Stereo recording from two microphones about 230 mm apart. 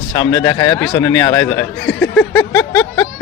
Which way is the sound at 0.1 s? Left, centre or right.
Centre.